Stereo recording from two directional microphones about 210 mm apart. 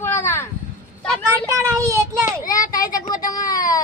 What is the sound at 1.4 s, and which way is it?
Child singing, 15° right (ahead or behind).